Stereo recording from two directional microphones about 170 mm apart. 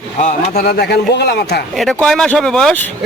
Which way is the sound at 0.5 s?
65° left (ahead or behind).